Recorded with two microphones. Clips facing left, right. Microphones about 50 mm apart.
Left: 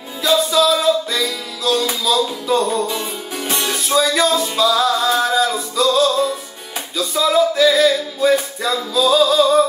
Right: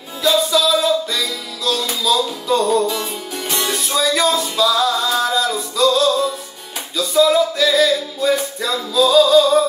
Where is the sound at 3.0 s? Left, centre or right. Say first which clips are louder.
Even; left.